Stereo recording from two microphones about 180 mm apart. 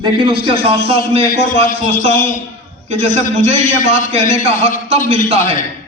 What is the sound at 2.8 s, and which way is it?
A man's voice, 40° right (ahead or behind).